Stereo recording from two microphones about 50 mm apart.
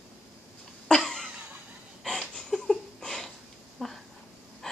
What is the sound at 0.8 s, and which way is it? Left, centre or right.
Cough, centre.